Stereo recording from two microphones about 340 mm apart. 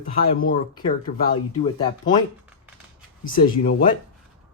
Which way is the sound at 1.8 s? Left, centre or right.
Centre.